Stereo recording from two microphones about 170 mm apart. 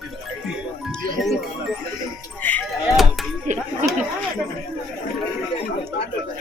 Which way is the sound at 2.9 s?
Centre (ahead or behind).